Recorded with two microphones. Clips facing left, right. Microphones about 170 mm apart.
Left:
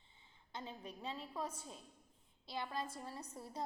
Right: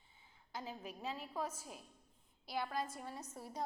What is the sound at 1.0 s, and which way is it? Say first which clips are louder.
Speech: right 2 dB; 30° left (ahead or behind).